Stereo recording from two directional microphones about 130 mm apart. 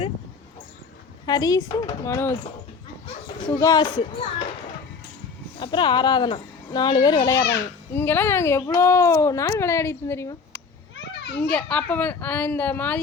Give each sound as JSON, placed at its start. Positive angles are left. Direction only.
{"t": 1.2, "sound": "speech", "side_deg": 30}
{"t": 3.6, "sound": "a woman's voice", "side_deg": 30}
{"t": 5.5, "sound": "a woman's voice", "side_deg": 40}
{"t": 7.9, "sound": "speech", "side_deg": 15}
{"t": 11.5, "sound": "speech", "side_deg": 10}